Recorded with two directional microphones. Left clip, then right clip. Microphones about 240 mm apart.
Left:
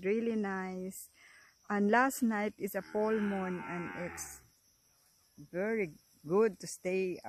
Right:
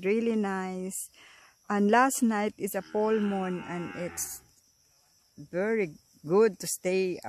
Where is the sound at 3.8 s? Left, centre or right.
Centre.